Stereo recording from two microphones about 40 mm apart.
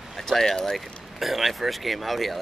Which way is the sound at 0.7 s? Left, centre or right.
Centre.